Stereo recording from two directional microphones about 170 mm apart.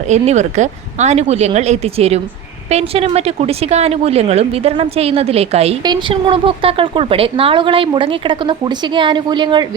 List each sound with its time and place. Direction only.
0.1 s speech: 40° right (ahead or behind)
5.8 s a woman's voice: 25° right (ahead or behind)